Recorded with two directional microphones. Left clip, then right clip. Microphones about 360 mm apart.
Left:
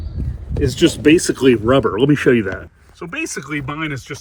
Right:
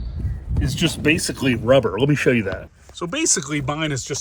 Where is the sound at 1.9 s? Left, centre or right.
Right.